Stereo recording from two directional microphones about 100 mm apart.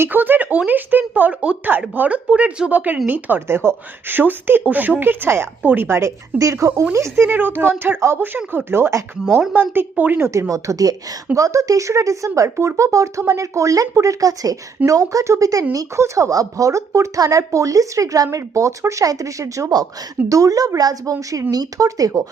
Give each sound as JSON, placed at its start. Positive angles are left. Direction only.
{"t": 0.0, "sound": "speech", "side_deg": -20}
{"t": 9.4, "sound": "speech", "side_deg": -15}
{"t": 10.5, "sound": "speech", "side_deg": -35}